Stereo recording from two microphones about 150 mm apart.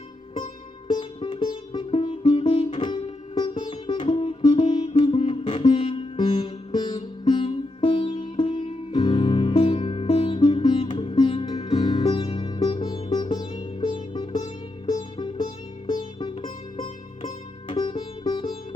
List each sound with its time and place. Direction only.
0.9 s music: 30° left (ahead or behind)
2.8 s music: 30° left (ahead or behind)
16.4 s music: 50° left (ahead or behind)
17.7 s music: 30° left (ahead or behind)